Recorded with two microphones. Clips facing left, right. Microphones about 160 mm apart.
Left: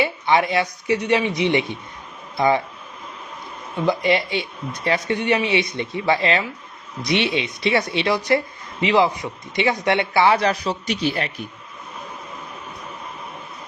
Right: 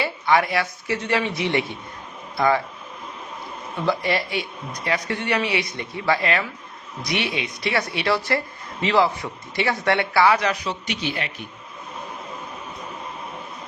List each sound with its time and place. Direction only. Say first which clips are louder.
0.0 s speech: left 1 dB; 20° left (ahead or behind)
3.8 s speech: left 4 dB; 20° left (ahead or behind); by 11.3 s 40° left (ahead or behind)